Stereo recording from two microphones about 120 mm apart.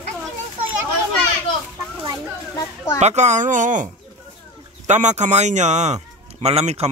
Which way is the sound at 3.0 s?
70° right (ahead or behind).